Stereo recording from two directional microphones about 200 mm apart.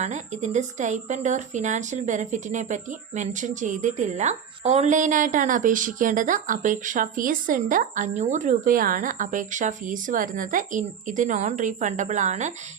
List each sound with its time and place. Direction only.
0.0 s a woman's voice: 35° right (ahead or behind)